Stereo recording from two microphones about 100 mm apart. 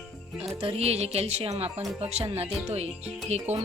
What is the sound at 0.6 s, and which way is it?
Speech, 90° right.